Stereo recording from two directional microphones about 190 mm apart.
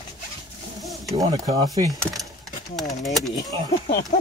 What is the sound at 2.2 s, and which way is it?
Speech, centre (ahead or behind).